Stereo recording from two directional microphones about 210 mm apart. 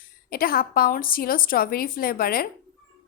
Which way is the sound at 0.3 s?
45° left (ahead or behind).